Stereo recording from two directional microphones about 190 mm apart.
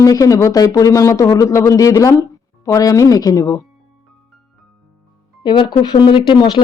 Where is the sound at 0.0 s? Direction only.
20° left (ahead or behind).